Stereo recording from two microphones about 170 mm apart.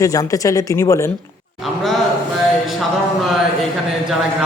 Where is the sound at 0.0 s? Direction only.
20° left (ahead or behind).